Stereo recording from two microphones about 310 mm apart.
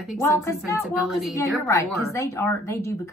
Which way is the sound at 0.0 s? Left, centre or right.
Centre.